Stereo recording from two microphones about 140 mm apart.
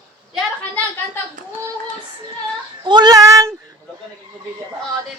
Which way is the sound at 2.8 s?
30° right (ahead or behind).